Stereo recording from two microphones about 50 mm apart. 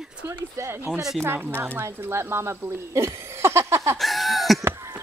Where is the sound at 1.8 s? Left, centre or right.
Right.